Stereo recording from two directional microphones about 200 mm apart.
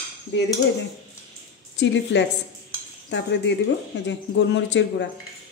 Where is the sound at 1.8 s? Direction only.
65° left (ahead or behind).